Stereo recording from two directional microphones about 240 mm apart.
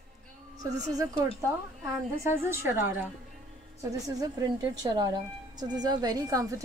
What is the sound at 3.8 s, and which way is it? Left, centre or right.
Speech, centre.